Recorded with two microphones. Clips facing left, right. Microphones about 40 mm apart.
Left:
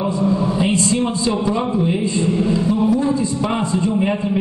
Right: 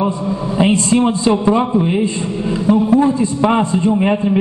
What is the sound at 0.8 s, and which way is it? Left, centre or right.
A man's voice, right.